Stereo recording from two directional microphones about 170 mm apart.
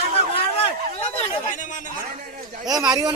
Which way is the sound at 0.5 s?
35° left (ahead or behind).